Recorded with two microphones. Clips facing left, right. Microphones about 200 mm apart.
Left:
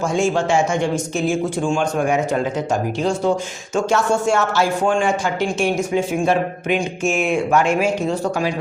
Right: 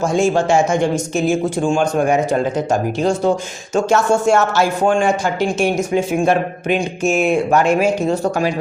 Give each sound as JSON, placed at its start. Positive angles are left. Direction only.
{"t": 0.1, "sound": "speech", "side_deg": -40}
{"t": 6.7, "sound": "speech", "side_deg": -35}